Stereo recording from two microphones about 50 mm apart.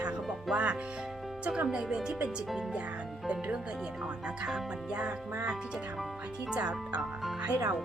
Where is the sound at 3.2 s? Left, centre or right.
Right.